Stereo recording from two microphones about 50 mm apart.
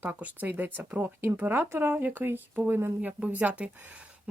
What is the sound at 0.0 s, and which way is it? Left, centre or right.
Speech, right.